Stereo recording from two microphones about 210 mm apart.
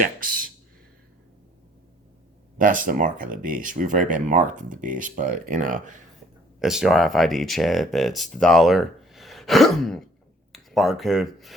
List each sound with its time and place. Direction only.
2.6 s speech: 40° right (ahead or behind)
6.6 s speech: centre (ahead or behind)